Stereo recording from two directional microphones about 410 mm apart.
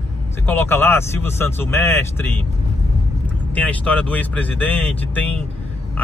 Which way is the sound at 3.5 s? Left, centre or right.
Centre.